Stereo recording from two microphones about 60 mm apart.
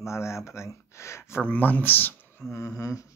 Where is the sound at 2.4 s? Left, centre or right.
Left.